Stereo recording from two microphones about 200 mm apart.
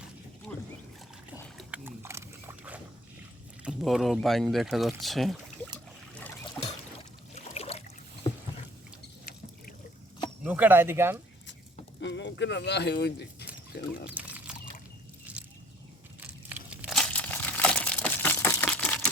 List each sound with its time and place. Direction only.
0.5 s rowboat: 10° left (ahead or behind)
1.5 s a sound: 10° right (ahead or behind)
3.6 s speech: centre (ahead or behind)
7.4 s boat: 30° left (ahead or behind)
10.4 s speech: 5° right (ahead or behind)
11.9 s speech: 65° left (ahead or behind)
14.1 s a sound: 10° right (ahead or behind)
16.2 s crumpling: 10° right (ahead or behind)